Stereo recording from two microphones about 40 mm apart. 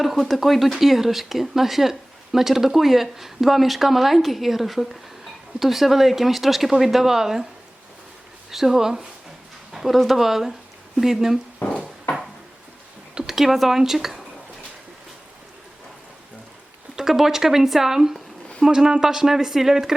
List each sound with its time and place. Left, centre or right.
0.0 s speech: centre
8.4 s speech: centre
9.7 s speech: centre
11.6 s music: left
13.2 s speech: centre
16.9 s speech: centre